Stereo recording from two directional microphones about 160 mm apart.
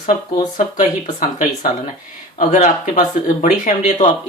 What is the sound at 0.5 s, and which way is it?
Speech, 55° left (ahead or behind).